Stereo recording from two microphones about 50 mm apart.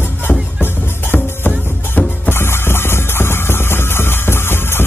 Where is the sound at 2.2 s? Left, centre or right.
Left.